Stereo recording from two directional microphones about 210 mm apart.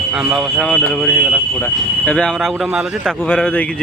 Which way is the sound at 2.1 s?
5° left (ahead or behind).